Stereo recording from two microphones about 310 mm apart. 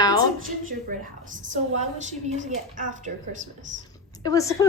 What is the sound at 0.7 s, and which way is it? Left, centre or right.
A woman's voice, right.